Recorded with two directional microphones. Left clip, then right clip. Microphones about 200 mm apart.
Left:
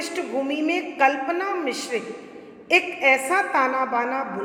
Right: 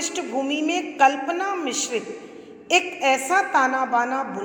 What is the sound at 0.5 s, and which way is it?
A woman's voice, centre (ahead or behind).